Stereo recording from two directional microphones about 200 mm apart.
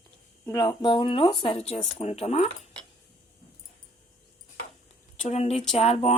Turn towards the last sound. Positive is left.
turn(degrees=30)  # may be behind; listen again after turning